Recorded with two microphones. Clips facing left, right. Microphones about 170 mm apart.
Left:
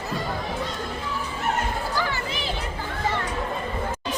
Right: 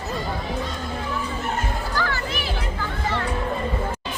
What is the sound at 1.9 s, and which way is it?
Children playing, 15° left (ahead or behind).